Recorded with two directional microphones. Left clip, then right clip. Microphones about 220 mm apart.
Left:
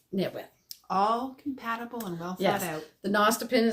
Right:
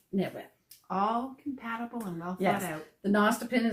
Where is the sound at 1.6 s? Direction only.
40° left (ahead or behind).